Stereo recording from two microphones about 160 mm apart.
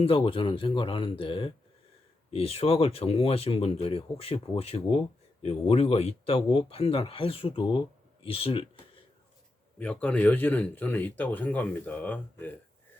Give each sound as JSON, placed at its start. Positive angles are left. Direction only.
{"t": 0.0, "sound": "speech", "side_deg": 35}
{"t": 9.7, "sound": "speech", "side_deg": 5}